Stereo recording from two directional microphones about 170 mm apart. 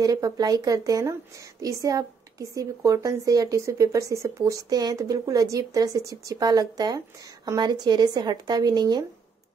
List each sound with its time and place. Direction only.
0.0 s a woman's voice: 20° right (ahead or behind)